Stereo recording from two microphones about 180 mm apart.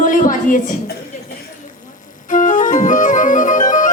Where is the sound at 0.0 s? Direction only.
50° left (ahead or behind).